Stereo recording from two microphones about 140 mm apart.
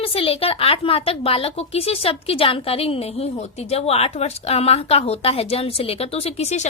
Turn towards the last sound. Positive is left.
turn(degrees=50)  # may be behind; listen again after turning